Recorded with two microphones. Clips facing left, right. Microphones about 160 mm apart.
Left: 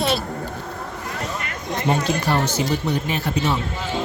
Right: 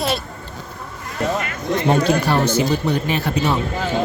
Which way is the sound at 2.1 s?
60° right (ahead or behind).